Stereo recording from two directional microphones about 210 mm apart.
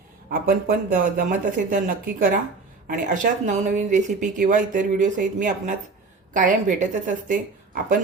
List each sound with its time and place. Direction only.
0.3 s speech: 45° right (ahead or behind)